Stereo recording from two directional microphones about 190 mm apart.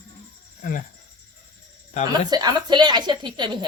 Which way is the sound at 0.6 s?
45° left (ahead or behind).